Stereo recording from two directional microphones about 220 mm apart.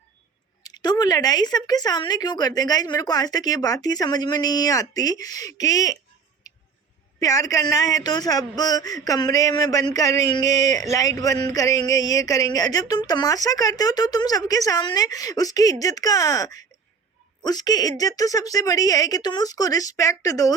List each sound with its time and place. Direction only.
0.6 s speech: 20° left (ahead or behind)
7.2 s speech: 15° left (ahead or behind)